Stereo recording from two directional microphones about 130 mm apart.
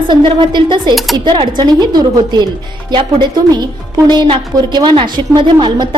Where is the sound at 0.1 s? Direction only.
35° right (ahead or behind).